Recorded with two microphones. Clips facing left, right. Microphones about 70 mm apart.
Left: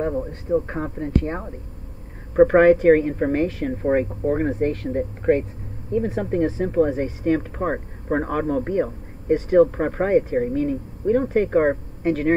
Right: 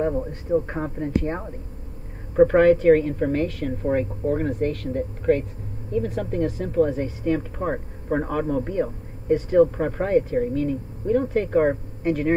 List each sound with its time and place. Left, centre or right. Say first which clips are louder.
0.0 s a man's voice: even; centre
1.0 s a woman's voice: left 1 dB; centre
2.3 s speech: left 2 dB; left
7.2 s speech: left 2 dB; left
8.3 s speech: left 2 dB; left
9.7 s speech: left 3 dB; left